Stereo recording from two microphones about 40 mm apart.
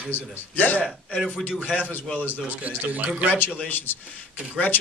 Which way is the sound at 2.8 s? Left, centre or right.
Right.